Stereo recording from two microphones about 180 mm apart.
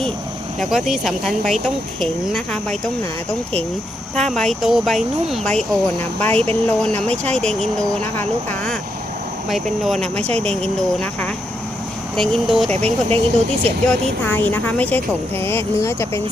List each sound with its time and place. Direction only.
0.6 s speech: centre (ahead or behind)
10.2 s speech: 35° right (ahead or behind)
10.4 s speech: 5° left (ahead or behind)
12.7 s speech: 35° right (ahead or behind)
13.8 s speech: 10° left (ahead or behind)